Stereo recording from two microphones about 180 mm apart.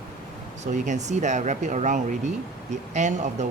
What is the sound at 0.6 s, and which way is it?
Speech, 40° right (ahead or behind).